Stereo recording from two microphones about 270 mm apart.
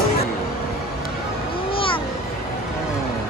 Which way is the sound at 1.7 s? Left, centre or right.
Centre.